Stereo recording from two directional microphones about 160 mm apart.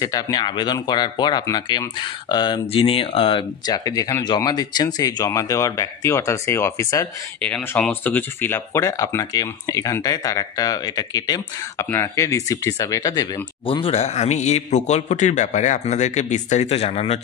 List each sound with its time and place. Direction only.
0.0 s speech: 25° left (ahead or behind)
7.4 s speech: 5° left (ahead or behind); by 17.2 s 40° left (ahead or behind)